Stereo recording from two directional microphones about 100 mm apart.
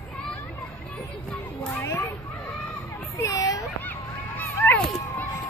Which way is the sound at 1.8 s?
30° left (ahead or behind).